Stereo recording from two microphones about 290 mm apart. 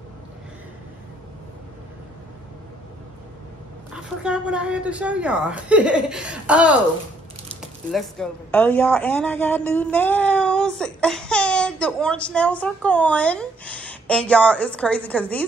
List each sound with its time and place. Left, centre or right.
3.9 s a woman's voice: centre